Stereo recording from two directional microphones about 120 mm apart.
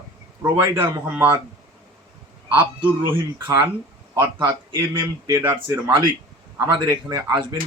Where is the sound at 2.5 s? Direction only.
15° right (ahead or behind).